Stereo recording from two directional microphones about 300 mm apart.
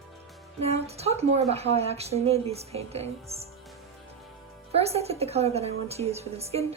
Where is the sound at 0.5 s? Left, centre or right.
Right.